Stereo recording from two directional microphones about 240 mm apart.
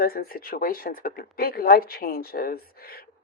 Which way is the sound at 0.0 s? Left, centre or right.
Left.